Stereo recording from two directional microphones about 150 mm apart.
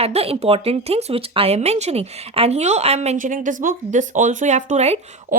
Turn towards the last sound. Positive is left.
turn(degrees=-45)  # may be behind; listen again after turning